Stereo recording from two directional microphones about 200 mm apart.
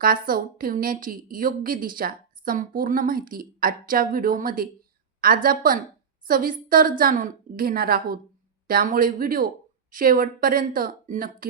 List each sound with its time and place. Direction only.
0.0 s a woman's voice: 45° right (ahead or behind)